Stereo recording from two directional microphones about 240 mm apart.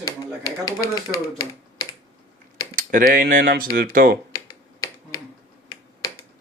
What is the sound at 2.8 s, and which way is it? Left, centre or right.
Speech, right.